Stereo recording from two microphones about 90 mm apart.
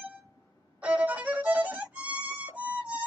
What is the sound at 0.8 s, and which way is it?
Violin, 15° right (ahead or behind).